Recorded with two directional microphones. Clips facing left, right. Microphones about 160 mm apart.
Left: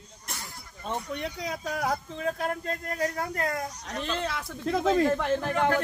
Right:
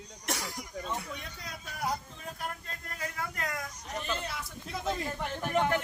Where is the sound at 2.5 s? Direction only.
50° left (ahead or behind).